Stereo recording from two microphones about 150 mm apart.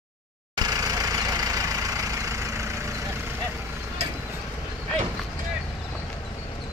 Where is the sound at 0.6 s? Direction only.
25° right (ahead or behind).